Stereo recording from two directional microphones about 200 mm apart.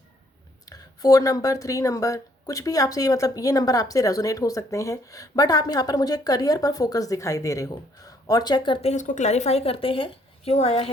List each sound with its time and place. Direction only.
0.6 s a woman's voice: 20° left (ahead or behind)